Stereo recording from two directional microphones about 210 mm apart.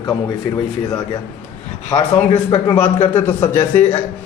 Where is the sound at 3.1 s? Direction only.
10° left (ahead or behind).